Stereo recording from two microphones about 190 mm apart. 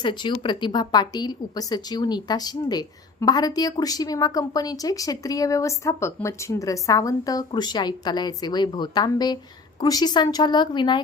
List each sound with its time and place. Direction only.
0.0 s a woman's voice: 25° left (ahead or behind)